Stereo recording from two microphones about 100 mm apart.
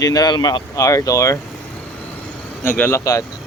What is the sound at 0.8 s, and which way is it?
Speech, 35° left (ahead or behind).